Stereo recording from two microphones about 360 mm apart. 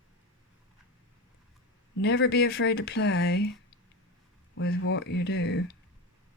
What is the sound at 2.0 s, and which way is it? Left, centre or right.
Speech, left.